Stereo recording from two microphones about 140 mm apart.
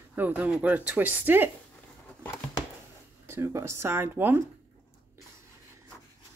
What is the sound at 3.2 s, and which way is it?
Speech, 15° right (ahead or behind).